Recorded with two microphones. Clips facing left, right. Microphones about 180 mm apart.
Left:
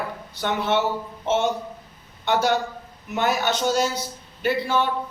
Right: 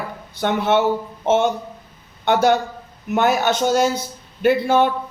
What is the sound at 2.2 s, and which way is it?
A man's voice, 55° right (ahead or behind).